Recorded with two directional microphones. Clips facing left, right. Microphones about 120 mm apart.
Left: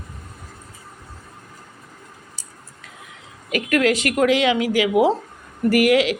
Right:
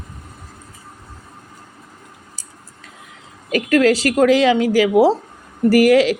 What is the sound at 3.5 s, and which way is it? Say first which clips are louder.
A woman's voice: right 4 dB; 35° right (ahead or behind).